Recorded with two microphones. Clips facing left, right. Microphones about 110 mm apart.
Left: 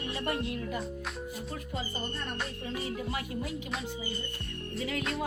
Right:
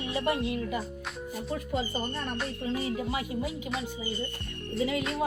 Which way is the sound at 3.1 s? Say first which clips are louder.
Right 3 dB; 5° right (ahead or behind).